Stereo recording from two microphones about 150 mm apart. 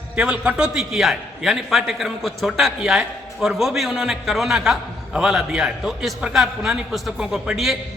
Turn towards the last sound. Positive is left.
turn(degrees=0)  # may be behind; listen again after turning